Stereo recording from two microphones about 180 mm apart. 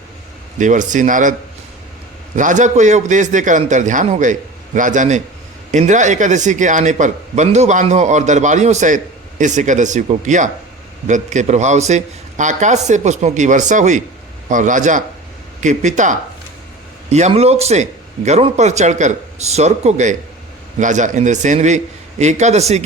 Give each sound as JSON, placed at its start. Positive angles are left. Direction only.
{"t": 0.6, "sound": "a man's voice", "side_deg": -45}